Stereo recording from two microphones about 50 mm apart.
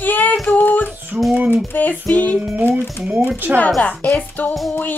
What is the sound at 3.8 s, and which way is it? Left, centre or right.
Speech, left.